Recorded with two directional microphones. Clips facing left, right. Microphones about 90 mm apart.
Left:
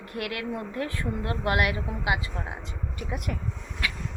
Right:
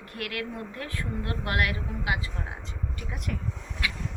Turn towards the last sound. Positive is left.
turn(degrees=-5)  # may be behind; listen again after turning